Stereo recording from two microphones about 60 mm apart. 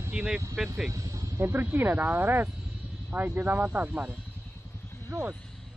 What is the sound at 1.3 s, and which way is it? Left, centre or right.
Speech, right.